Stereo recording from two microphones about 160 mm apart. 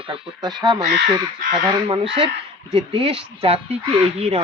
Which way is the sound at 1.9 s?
35° right (ahead or behind).